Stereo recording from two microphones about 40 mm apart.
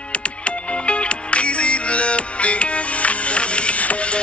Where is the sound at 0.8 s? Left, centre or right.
Left.